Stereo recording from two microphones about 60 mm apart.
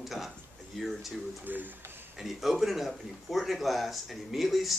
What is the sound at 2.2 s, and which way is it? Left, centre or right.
Speech, centre.